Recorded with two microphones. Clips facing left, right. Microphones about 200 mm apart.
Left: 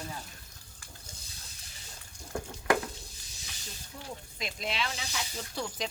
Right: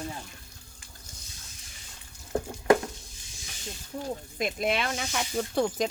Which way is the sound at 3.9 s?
45° right (ahead or behind).